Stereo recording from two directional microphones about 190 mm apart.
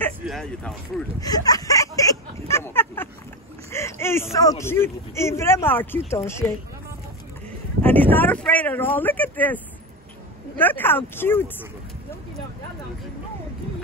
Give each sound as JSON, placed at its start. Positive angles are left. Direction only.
{"t": 0.3, "sound": "speech", "side_deg": 0}
{"t": 1.2, "sound": "speech", "side_deg": 20}
{"t": 2.4, "sound": "a sound", "side_deg": 15}
{"t": 3.7, "sound": "speech", "side_deg": 15}
{"t": 7.8, "sound": "speech", "side_deg": 10}
{"t": 10.6, "sound": "speech", "side_deg": 10}